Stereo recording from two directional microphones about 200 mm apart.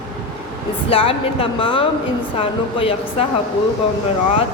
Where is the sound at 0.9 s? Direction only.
30° left (ahead or behind).